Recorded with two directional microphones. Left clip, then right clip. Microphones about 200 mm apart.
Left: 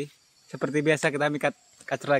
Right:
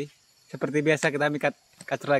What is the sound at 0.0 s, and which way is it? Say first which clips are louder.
Speech: even; 5° left (ahead or behind).